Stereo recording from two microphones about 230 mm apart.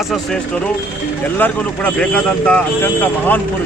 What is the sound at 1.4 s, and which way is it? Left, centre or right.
Speech, centre.